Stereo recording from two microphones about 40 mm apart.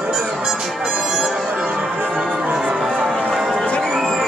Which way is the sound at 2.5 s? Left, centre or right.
Right.